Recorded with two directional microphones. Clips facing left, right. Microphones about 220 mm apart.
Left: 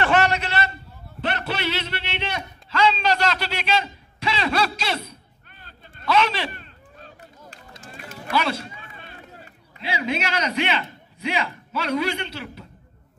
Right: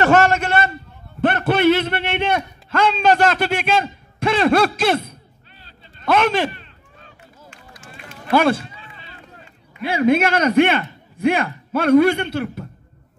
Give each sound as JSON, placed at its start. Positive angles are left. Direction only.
{"t": 0.0, "sound": "a sound", "side_deg": -45}
{"t": 1.2, "sound": "a man's voice", "side_deg": -50}
{"t": 5.6, "sound": "a sound", "side_deg": 50}
{"t": 6.0, "sound": "a man's voice", "side_deg": -50}
{"t": 6.5, "sound": "run", "side_deg": 40}
{"t": 8.3, "sound": "a man's voice", "side_deg": -50}
{"t": 8.7, "sound": "run", "side_deg": 50}
{"t": 9.8, "sound": "a man's voice", "side_deg": -55}